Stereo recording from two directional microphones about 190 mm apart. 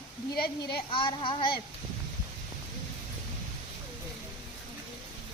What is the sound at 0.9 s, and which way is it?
Speech, 25° left (ahead or behind).